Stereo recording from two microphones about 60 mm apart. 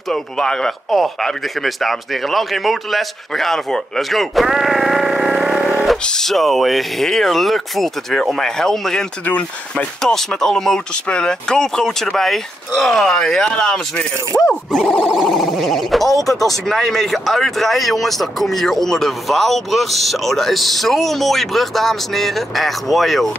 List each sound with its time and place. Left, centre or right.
0.1 s speech: centre
6.0 s speech: centre
9.2 s speech: left
10.0 s speech: centre
14.3 s speech: left
14.7 s speech: centre